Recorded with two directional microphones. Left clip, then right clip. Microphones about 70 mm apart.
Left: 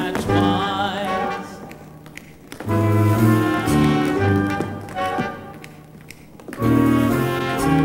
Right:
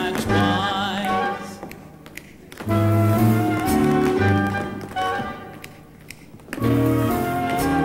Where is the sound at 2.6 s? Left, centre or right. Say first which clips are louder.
Left 1 dB; left.